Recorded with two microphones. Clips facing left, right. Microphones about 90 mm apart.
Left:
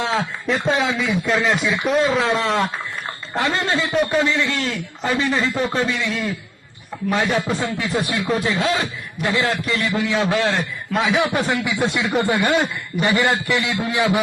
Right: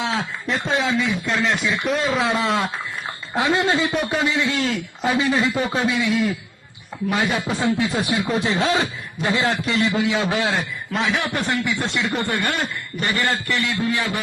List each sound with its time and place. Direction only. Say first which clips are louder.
0.0 s speech: left 3 dB; centre (ahead or behind)
3.3 s a man's voice: right 1 dB; 15° right (ahead or behind)
5.0 s a man's voice: right 1 dB; 10° right (ahead or behind)
7.6 s a man's voice: right 2 dB; 20° right (ahead or behind)
10.6 s a man's voice: left 3 dB; centre (ahead or behind); by 14.2 s 15° left (ahead or behind)